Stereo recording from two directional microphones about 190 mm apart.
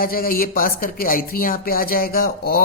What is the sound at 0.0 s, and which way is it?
Speech, 50° left (ahead or behind).